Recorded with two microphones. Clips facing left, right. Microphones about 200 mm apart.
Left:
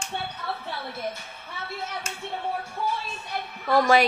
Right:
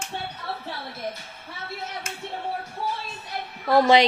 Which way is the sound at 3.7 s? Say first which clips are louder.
Right 3 dB; 25° right (ahead or behind).